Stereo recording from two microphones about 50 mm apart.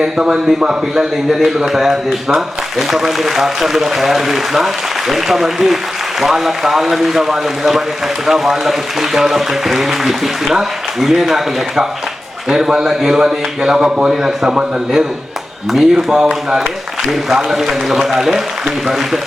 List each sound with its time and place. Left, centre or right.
0.0 s a man's voice: centre